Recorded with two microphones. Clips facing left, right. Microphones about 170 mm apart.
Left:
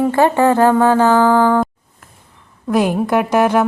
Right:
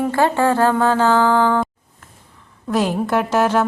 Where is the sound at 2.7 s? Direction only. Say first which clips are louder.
Left 3 dB; 10° left (ahead or behind).